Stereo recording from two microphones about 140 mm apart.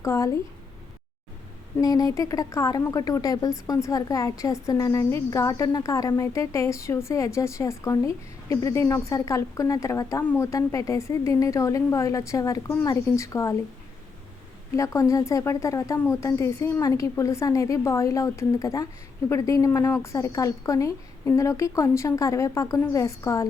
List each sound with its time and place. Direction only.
0.0 s speech: 20° left (ahead or behind)
1.8 s speech: 25° left (ahead or behind)
15.1 s speech: 25° left (ahead or behind)